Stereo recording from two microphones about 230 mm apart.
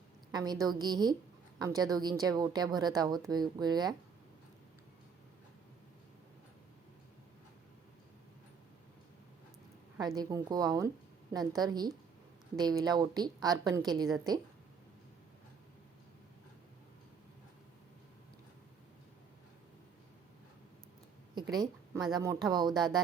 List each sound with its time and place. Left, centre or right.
0.3 s a woman's voice: centre
10.2 s a woman's voice: centre
21.5 s a woman's voice: centre